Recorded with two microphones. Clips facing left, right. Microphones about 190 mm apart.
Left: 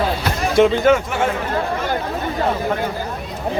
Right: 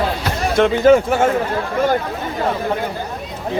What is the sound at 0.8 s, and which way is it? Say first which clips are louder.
Speech: right 4 dB; 35° right (ahead or behind).